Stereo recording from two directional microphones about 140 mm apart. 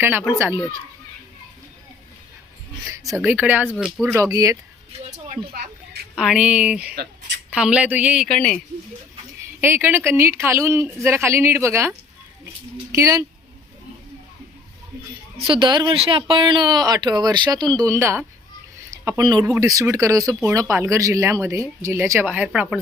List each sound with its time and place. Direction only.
0.0 s speech: 15° right (ahead or behind)
2.8 s speech: 25° right (ahead or behind)
3.2 s speech: 15° right (ahead or behind)
6.1 s speech: 5° right (ahead or behind)
8.3 s speech: 5° left (ahead or behind)
9.6 s speech: 15° right (ahead or behind)
15.4 s a woman's voice: 35° right (ahead or behind); by 22.6 s 10° right (ahead or behind)